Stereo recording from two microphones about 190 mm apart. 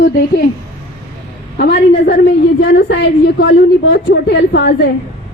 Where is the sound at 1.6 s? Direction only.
60° left (ahead or behind).